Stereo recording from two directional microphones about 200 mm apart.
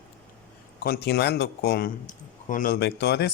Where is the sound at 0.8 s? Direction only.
50° left (ahead or behind).